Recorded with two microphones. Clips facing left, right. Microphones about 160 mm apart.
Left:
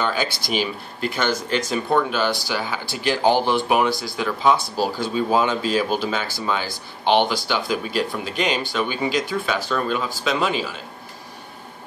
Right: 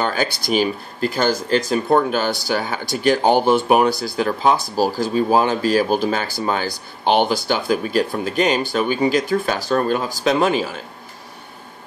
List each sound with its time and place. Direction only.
0.0 s speech: 45° right (ahead or behind)